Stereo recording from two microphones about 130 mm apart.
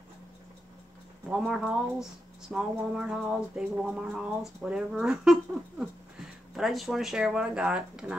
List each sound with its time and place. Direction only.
1.3 s speech: 5° right (ahead or behind)